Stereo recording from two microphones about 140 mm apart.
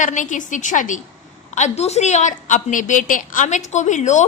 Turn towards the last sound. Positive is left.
turn(degrees=60)  # may be behind; listen again after turning